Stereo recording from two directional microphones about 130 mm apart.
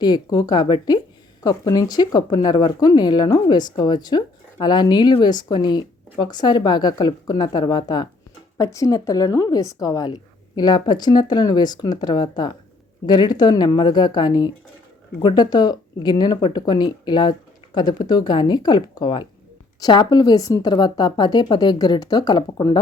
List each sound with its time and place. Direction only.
0.0 s speech: 30° left (ahead or behind)